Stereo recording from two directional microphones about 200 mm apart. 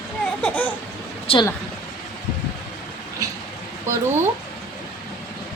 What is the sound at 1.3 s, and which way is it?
Speech, 30° left (ahead or behind).